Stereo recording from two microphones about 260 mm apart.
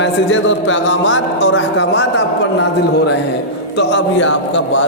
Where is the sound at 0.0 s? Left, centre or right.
Left.